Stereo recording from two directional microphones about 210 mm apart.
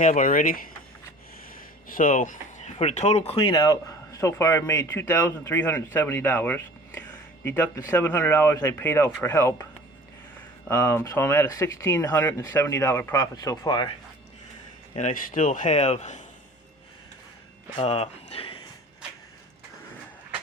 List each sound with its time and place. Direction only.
0.0 s a man's voice: 40° left (ahead or behind); by 9.6 s 15° left (ahead or behind)
10.7 s speech: 10° left (ahead or behind)
14.9 s a man's voice: 40° left (ahead or behind)
17.7 s speech: 30° left (ahead or behind)